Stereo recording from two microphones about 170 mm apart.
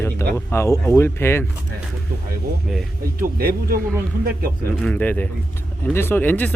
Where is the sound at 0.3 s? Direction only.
15° left (ahead or behind).